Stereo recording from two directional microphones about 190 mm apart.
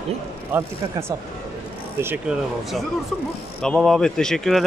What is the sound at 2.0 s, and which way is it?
Speech, 5° right (ahead or behind).